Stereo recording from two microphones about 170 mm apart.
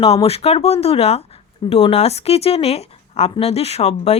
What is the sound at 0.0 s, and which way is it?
Speech, 35° left (ahead or behind).